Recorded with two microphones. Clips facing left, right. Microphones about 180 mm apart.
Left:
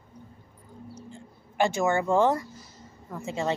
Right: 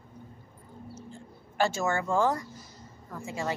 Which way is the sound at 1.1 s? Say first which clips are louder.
Left 2 dB; 15° left (ahead or behind).